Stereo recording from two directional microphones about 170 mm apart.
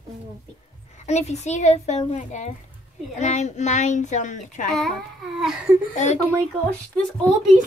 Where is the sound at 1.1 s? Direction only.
40° left (ahead or behind).